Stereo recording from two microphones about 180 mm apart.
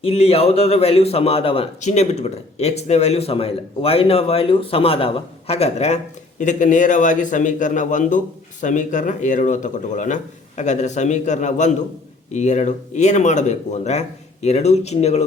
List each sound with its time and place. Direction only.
0.0 s a man's voice: 35° left (ahead or behind)